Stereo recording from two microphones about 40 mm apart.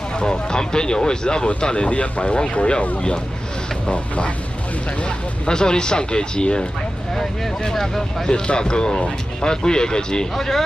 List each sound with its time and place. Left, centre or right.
0.2 s speech: left
5.0 s speech: centre
7.2 s speech: centre
10.3 s speech: centre